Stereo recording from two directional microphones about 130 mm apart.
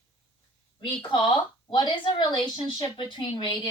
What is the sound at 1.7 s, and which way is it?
A woman's voice, 35° left (ahead or behind).